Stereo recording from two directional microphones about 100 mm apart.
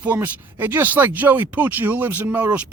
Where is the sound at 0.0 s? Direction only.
20° right (ahead or behind).